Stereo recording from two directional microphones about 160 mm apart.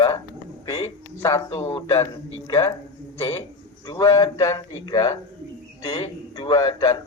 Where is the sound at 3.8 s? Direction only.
25° left (ahead or behind).